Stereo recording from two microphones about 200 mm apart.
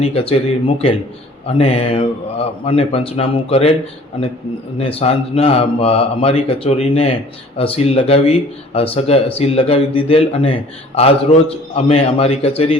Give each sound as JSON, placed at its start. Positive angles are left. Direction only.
{"t": 0.0, "sound": "a man's voice", "side_deg": 30}
{"t": 4.8, "sound": "a man's voice", "side_deg": 30}